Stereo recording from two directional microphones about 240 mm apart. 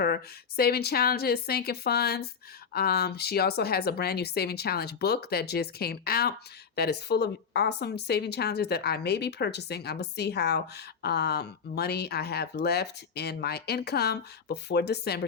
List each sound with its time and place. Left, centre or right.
0.0 s a woman's voice: left